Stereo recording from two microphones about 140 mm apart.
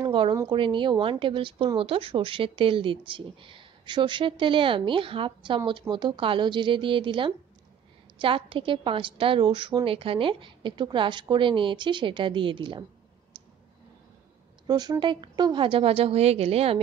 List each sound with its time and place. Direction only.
0.0 s speech: 35° right (ahead or behind)
14.7 s speech: 30° right (ahead or behind); by 16.8 s 45° right (ahead or behind)